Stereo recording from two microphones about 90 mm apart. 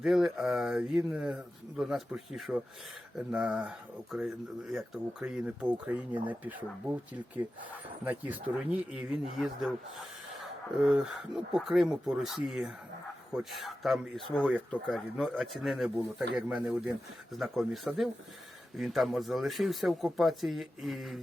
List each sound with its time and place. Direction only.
0.0 s speech: 5° right (ahead or behind)
10.8 s speech: 10° right (ahead or behind)